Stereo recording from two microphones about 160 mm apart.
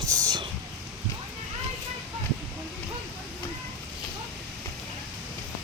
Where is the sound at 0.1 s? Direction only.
25° right (ahead or behind).